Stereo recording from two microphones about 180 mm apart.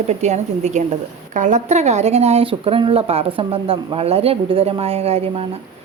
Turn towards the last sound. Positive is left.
turn(degrees=-35)  # may be behind; listen again after turning